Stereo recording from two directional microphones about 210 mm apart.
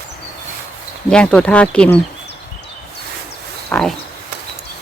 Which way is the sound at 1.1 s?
5° left (ahead or behind).